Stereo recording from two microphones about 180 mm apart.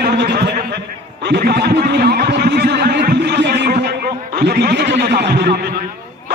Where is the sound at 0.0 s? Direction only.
60° right (ahead or behind).